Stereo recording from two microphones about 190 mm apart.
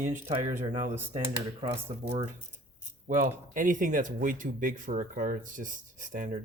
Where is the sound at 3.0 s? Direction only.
45° right (ahead or behind).